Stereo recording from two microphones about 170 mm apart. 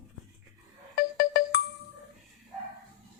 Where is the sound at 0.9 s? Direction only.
60° left (ahead or behind).